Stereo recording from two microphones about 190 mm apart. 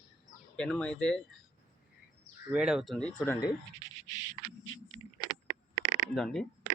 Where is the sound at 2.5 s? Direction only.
5° right (ahead or behind).